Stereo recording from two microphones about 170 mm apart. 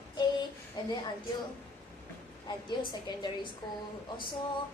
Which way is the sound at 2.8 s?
25° left (ahead or behind).